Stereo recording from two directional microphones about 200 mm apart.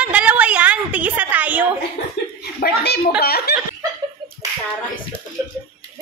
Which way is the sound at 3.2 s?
50° left (ahead or behind).